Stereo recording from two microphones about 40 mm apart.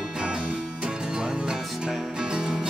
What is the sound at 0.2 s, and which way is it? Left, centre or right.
Music, right.